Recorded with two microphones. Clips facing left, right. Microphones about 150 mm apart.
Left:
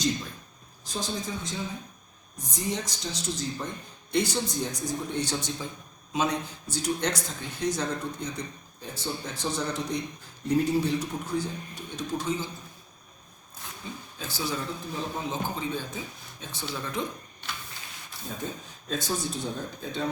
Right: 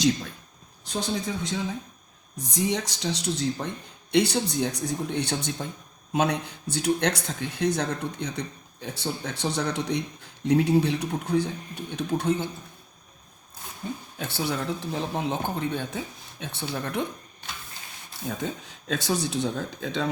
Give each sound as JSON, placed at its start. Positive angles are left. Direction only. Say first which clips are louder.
{"t": 0.9, "sound": "speech", "louder": "right 4 dB", "side_deg": -65}
{"t": 13.8, "sound": "speech", "louder": "right 6 dB", "side_deg": -55}
{"t": 18.3, "sound": "speech", "louder": "right 4 dB", "side_deg": -80}